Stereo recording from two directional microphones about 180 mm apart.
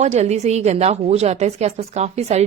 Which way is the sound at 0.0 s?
40° right (ahead or behind).